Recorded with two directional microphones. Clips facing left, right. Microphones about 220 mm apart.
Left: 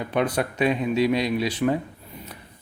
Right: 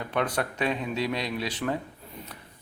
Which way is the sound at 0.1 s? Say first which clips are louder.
Left 4 dB; 15° left (ahead or behind).